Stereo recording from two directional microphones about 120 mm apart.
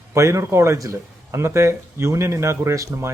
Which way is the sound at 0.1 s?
25° right (ahead or behind).